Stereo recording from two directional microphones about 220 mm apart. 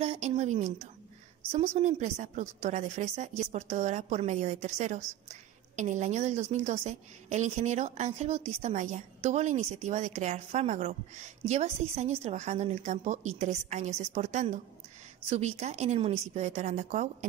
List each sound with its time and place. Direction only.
0.0 s a woman's voice: 30° right (ahead or behind)